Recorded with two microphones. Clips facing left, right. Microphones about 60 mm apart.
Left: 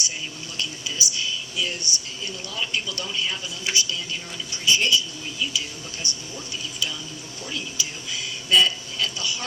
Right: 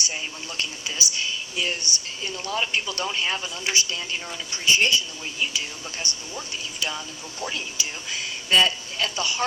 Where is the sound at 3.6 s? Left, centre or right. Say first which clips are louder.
Left 1 dB; right.